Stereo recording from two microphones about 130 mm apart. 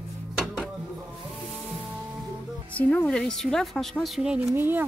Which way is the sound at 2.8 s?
10° left (ahead or behind).